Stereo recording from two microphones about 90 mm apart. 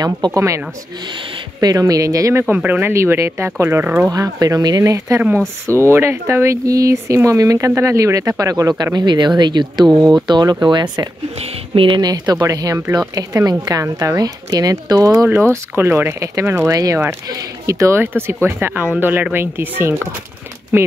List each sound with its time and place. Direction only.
0.3 s speech: 35° right (ahead or behind)
1.6 s speech: 45° right (ahead or behind)
2.5 s speech: 20° right (ahead or behind)
2.9 s speech: 30° right (ahead or behind)
4.1 s speech: 40° right (ahead or behind)
11.7 s a woman's voice: 75° right (ahead or behind)
12.0 s speech: 50° right (ahead or behind)
15.2 s speech: 20° right (ahead or behind)
16.7 s speech: 40° right (ahead or behind); by 20.2 s 20° right (ahead or behind)